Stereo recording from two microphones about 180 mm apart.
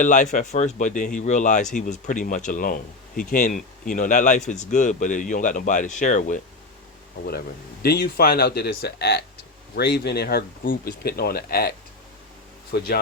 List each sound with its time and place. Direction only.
0.0 s speech: 45° left (ahead or behind)
7.3 s speech: 60° left (ahead or behind)
12.7 s speech: 60° left (ahead or behind)